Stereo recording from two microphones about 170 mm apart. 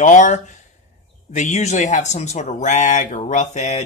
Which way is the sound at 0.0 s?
45° left (ahead or behind).